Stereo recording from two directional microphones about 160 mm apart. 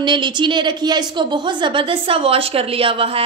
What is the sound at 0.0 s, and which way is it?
A woman's voice, 30° right (ahead or behind).